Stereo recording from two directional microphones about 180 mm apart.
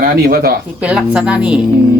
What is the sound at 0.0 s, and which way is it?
Speech, 55° right (ahead or behind).